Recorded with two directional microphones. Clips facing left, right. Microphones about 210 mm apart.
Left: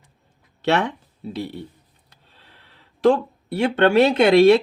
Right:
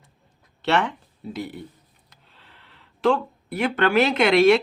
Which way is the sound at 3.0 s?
35° left (ahead or behind).